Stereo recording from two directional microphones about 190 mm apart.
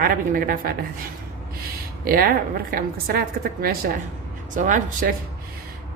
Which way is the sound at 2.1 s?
50° right (ahead or behind).